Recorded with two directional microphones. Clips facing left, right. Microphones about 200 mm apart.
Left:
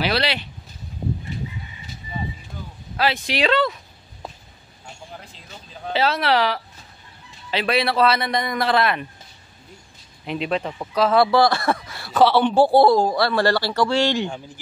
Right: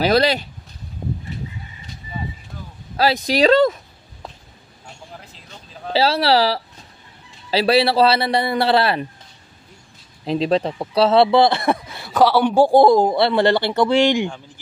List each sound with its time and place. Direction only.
0.0 s a man's voice: 40° right (ahead or behind)
3.0 s a man's voice: 40° right (ahead or behind)
4.8 s a sound: centre (ahead or behind)
5.9 s a man's voice: 30° right (ahead or behind)
10.2 s speech: 35° right (ahead or behind); by 14.3 s 15° right (ahead or behind)